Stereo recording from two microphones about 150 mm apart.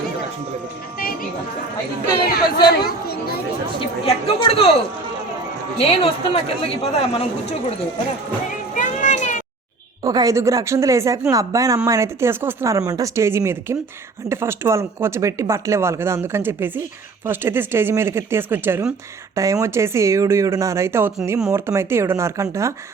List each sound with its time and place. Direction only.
0.9 s music: 70° left (ahead or behind)
2.7 s speech: 90° left
3.8 s a woman's voice: 40° left (ahead or behind)
5.8 s a woman's voice: 40° left (ahead or behind)
8.4 s a sound: 60° left (ahead or behind)
10.0 s speech: 25° right (ahead or behind)